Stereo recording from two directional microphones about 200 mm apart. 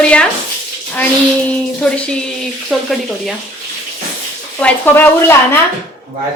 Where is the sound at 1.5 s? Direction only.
5° left (ahead or behind).